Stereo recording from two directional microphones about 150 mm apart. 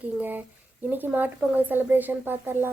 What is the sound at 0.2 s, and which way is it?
A woman's voice, 10° right (ahead or behind).